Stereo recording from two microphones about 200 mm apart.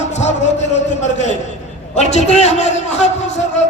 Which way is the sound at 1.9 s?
35° left (ahead or behind).